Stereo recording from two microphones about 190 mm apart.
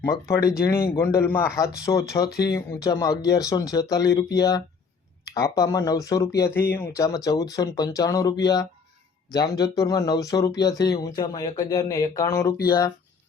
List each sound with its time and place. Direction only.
0.0 s a man's voice: 15° left (ahead or behind)